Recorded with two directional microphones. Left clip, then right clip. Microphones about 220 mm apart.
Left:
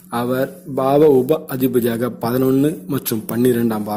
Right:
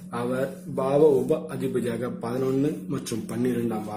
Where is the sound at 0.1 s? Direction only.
40° left (ahead or behind).